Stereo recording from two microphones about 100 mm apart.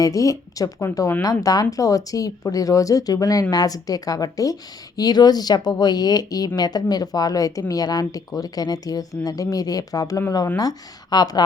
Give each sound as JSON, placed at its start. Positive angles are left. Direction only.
{"t": 0.0, "sound": "speech", "side_deg": 35}